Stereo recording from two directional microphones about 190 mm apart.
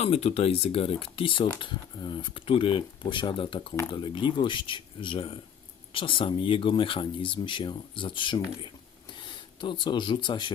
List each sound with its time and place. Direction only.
0.0 s speech: 35° left (ahead or behind)